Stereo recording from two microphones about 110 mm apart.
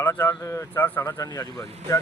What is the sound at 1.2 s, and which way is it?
Speech, 35° left (ahead or behind).